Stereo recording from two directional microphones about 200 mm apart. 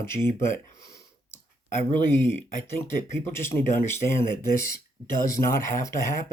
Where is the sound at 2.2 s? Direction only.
10° left (ahead or behind).